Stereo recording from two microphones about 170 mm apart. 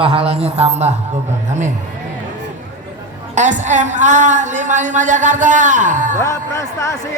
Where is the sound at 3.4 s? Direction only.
45° right (ahead or behind).